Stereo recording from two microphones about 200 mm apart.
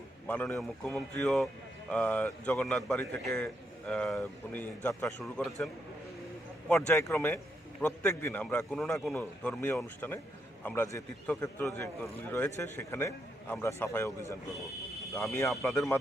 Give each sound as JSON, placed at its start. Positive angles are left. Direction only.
{"t": 0.3, "sound": "a man's voice", "side_deg": 5}
{"t": 6.7, "sound": "a man's voice", "side_deg": 5}
{"t": 15.4, "sound": "a man's voice", "side_deg": 0}